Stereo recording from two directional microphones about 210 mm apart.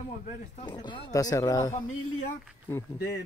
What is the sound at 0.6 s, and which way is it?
Speech, 20° left (ahead or behind).